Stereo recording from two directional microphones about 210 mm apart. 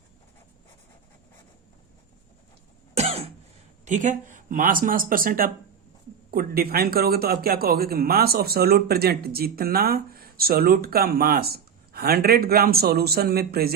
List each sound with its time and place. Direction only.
3.0 s cough: 30° right (ahead or behind)
3.8 s a man's voice: 35° right (ahead or behind)